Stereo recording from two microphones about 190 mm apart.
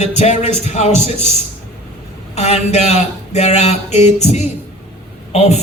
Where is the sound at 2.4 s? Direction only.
35° left (ahead or behind).